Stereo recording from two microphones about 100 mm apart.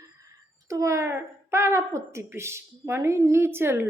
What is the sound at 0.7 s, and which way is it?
A child's voice, 30° right (ahead or behind).